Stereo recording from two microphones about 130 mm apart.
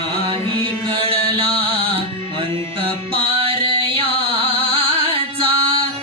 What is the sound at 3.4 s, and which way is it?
Music, 45° right (ahead or behind).